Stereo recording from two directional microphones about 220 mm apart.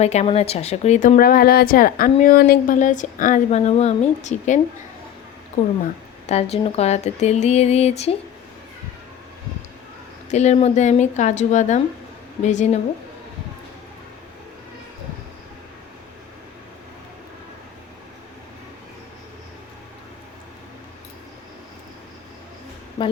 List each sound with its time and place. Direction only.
0.0 s a woman's voice: 30° left (ahead or behind)
6.2 s speech: 30° left (ahead or behind)
10.2 s a woman's voice: 30° left (ahead or behind)
23.0 s a woman's voice: 20° left (ahead or behind)